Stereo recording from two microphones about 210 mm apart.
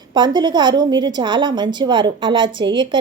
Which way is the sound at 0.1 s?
20° right (ahead or behind).